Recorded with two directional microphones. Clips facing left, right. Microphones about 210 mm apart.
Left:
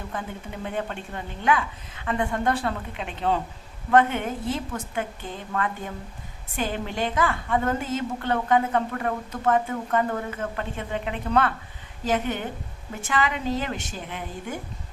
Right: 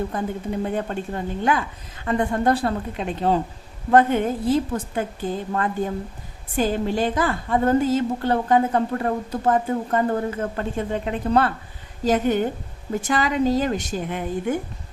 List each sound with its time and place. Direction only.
0.1 s a woman's voice: 40° right (ahead or behind)